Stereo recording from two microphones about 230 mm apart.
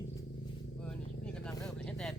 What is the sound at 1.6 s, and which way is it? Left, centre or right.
Speech, centre.